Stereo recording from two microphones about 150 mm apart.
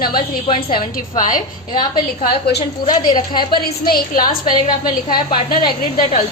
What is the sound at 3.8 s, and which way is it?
Speech, 85° left.